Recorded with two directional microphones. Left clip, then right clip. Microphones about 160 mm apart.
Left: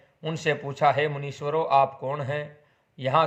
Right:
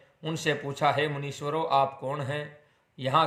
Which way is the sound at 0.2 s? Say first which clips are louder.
Left 2 dB; 20° right (ahead or behind).